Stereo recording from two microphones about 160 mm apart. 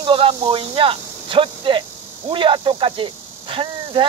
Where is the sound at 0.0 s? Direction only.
35° right (ahead or behind).